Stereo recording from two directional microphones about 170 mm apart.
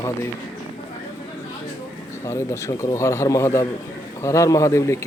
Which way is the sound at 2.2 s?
15° left (ahead or behind).